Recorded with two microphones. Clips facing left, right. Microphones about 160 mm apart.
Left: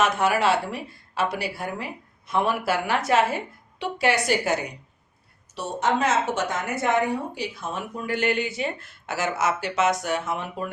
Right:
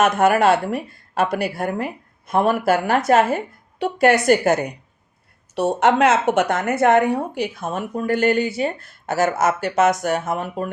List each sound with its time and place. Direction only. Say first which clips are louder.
0.0 s a woman's voice: right 6 dB; 50° right (ahead or behind)
5.5 s a woman's voice: right 8 dB; 65° right (ahead or behind); by 10.7 s 45° right (ahead or behind)